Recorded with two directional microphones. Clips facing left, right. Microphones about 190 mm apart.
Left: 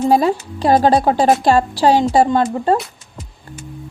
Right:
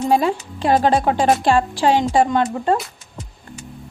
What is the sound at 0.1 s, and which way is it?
A woman's voice, 40° left (ahead or behind).